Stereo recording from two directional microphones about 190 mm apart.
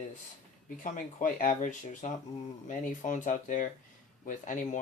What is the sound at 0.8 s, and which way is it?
Speech, 40° left (ahead or behind).